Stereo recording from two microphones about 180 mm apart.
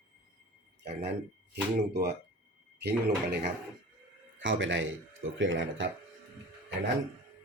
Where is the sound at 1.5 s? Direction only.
65° right (ahead or behind).